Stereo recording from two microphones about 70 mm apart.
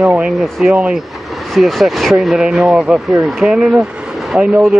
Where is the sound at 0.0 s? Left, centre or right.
Centre.